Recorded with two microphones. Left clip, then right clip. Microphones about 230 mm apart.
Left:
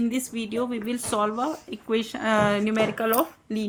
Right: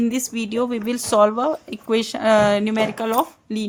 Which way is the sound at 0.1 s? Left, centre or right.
Right.